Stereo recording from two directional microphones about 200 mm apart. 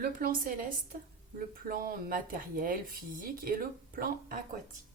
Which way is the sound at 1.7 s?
45° right (ahead or behind).